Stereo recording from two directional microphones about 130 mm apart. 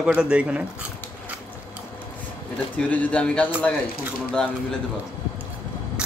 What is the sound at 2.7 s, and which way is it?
Speech, 10° left (ahead or behind).